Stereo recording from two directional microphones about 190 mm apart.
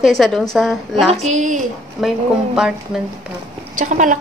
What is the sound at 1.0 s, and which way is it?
Speech, 35° right (ahead or behind).